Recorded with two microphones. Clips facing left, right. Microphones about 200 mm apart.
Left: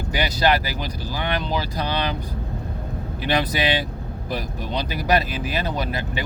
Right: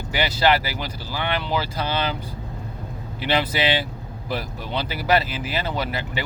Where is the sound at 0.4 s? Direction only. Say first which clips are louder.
Right 1 dB; 15° left (ahead or behind).